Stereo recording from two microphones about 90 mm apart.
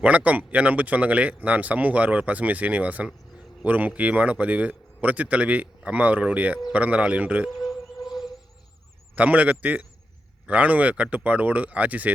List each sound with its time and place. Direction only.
0.0 s speech: 15° right (ahead or behind)
7.5 s a sound: centre (ahead or behind)
9.1 s speech: 15° right (ahead or behind)